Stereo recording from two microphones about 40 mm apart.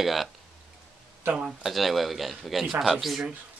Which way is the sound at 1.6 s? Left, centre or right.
Centre.